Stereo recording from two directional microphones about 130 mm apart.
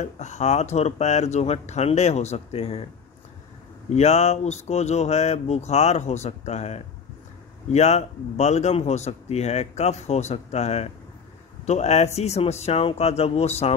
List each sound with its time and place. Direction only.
0.0 s speech: 60° left (ahead or behind)
3.9 s speech: 60° left (ahead or behind)